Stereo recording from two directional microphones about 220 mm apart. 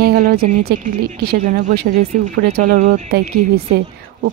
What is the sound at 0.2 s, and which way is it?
Speech, 35° right (ahead or behind).